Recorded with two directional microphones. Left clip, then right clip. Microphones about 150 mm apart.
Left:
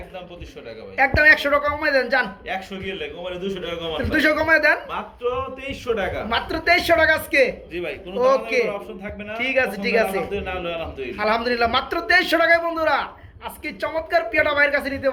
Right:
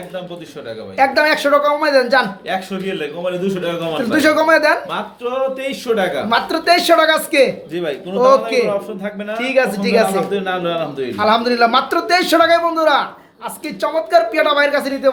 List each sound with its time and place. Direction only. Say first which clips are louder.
0.9 s a man's voice: right 1 dB; 5° right (ahead or behind)
2.5 s a man's voice: right 7 dB; 70° right (ahead or behind)
4.1 s a man's voice: right 5 dB; 10° right (ahead or behind)
5.6 s a man's voice: right 7 dB; 75° right (ahead or behind)
6.2 s a man's voice: right 5 dB; 5° right (ahead or behind)
10.3 s a man's voice: right 8 dB; 60° right (ahead or behind)
11.2 s a man's voice: right 7 dB; 5° right (ahead or behind)